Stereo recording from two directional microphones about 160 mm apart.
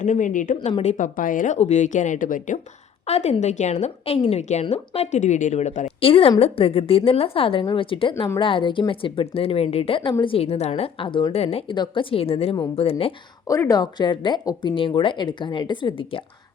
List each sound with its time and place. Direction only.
0.0 s a woman's voice: 50° left (ahead or behind)
1.5 s a woman's voice: 45° left (ahead or behind)
3.1 s a woman's voice: 45° left (ahead or behind)
13.5 s speech: 20° left (ahead or behind)